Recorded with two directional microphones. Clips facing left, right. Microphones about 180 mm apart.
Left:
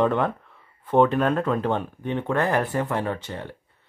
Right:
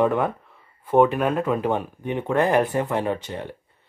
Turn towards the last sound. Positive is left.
turn(degrees=-15)  # may be behind; listen again after turning